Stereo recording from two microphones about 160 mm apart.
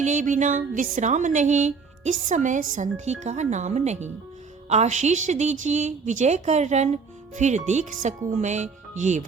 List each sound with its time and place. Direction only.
0.0 s speech: 50° right (ahead or behind)